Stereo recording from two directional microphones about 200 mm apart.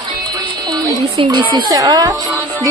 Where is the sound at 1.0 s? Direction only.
25° right (ahead or behind).